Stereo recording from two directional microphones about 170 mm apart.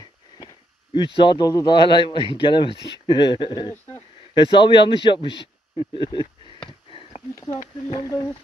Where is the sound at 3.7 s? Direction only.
10° left (ahead or behind).